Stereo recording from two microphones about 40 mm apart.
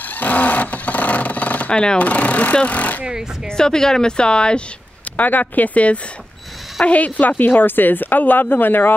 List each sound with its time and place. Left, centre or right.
0.1 s vehicle: left
1.7 s speech: left
2.0 s speech: left
3.4 s speech: centre
5.1 s a woman's voice: left